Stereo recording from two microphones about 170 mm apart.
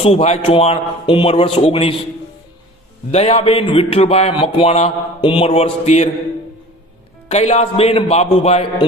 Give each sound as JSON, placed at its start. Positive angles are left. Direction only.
{"t": 0.0, "sound": "a man's voice", "side_deg": 35}
{"t": 3.1, "sound": "a man's voice", "side_deg": 40}
{"t": 7.3, "sound": "a man's voice", "side_deg": 40}